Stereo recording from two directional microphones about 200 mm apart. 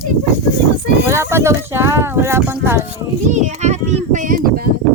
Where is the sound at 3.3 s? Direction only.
35° right (ahead or behind).